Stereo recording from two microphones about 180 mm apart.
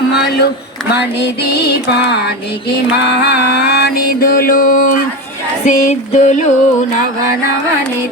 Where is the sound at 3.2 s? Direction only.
70° left (ahead or behind); by 6.5 s 40° left (ahead or behind).